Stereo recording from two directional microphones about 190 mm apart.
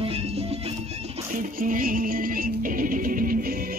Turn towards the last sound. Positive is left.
turn(degrees=-50)  # may be behind; listen again after turning